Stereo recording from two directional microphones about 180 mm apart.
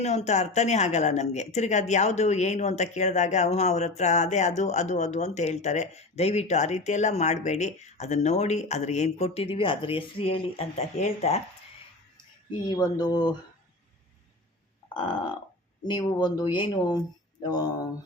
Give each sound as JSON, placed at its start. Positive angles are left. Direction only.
{"t": 0.0, "sound": "speech", "side_deg": 35}
{"t": 12.6, "sound": "speech", "side_deg": 20}
{"t": 14.9, "sound": "speech", "side_deg": 25}